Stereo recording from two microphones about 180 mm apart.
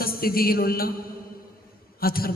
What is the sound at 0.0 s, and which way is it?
Speech, 55° left (ahead or behind).